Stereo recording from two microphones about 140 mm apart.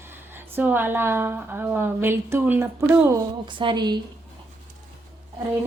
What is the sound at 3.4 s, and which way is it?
Speech, 35° right (ahead or behind).